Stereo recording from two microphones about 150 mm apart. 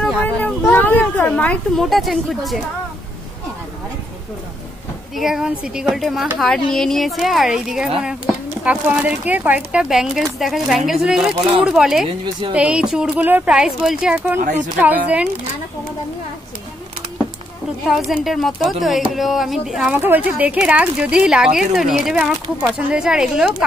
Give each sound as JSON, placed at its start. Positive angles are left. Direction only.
{"t": 0.0, "sound": "a sound", "side_deg": 10}
{"t": 0.7, "sound": "speech", "side_deg": 15}
{"t": 5.1, "sound": "speech", "side_deg": 0}
{"t": 12.1, "sound": "speech", "side_deg": -35}
{"t": 12.5, "sound": "speech", "side_deg": -5}
{"t": 17.8, "sound": "speech", "side_deg": -5}